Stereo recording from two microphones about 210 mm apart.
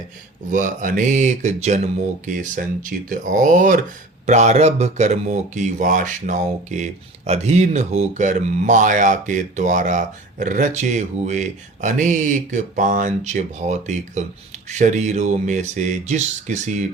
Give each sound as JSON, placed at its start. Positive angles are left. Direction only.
{"t": 0.5, "sound": "speech", "side_deg": -40}